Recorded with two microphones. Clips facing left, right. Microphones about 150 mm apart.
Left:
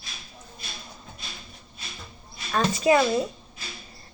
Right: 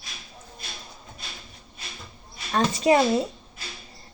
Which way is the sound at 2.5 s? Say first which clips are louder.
Right 1 dB; 35° right (ahead or behind).